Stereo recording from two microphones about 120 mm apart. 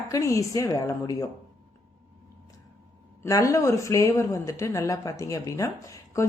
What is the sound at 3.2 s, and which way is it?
Speech, 25° left (ahead or behind).